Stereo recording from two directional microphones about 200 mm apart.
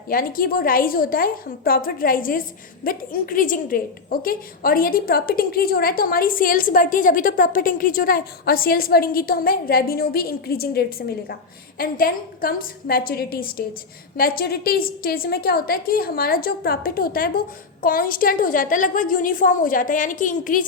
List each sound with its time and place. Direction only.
0.1 s a woman's voice: 45° left (ahead or behind)